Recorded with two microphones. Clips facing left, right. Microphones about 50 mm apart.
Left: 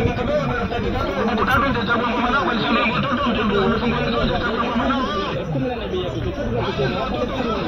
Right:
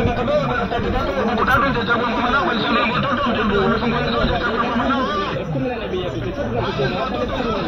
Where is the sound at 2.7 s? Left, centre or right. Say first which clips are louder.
Right 1 dB; centre.